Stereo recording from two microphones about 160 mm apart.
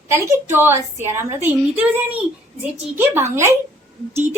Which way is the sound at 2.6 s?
10° right (ahead or behind).